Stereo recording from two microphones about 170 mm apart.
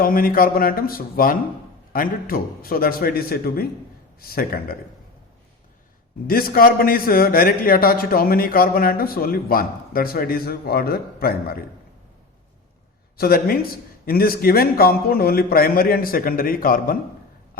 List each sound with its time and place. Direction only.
0.0 s a man's voice: 55° left (ahead or behind)
6.2 s a man's voice: 60° left (ahead or behind)
13.1 s a man's voice: 60° left (ahead or behind)